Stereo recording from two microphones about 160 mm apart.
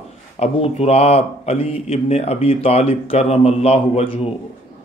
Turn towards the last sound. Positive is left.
turn(degrees=35)  # may be behind; listen again after turning